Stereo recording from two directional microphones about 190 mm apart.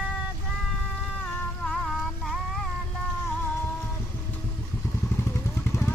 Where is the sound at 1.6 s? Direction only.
5° left (ahead or behind).